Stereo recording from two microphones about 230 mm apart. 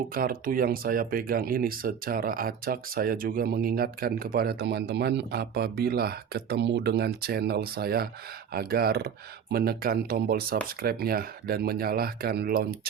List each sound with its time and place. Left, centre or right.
0.1 s speech: right